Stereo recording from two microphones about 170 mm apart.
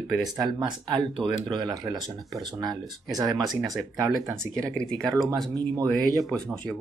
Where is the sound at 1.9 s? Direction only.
Centre (ahead or behind).